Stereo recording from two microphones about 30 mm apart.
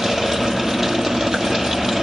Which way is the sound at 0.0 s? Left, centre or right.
Centre.